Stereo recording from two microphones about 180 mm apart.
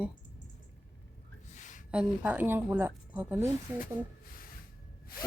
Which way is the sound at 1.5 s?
45° left (ahead or behind).